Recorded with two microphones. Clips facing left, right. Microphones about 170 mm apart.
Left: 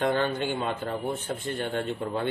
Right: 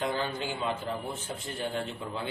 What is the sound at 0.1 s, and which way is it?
Speech, 60° left (ahead or behind).